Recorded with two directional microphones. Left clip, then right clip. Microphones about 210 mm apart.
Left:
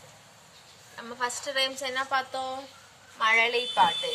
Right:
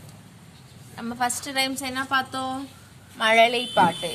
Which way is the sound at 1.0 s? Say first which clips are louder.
Right 5 dB; 50° right (ahead or behind).